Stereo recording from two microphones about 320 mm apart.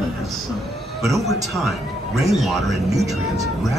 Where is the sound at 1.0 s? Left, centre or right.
Centre.